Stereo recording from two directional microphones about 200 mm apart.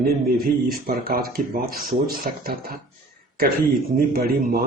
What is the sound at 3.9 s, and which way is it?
Speech, 50° right (ahead or behind).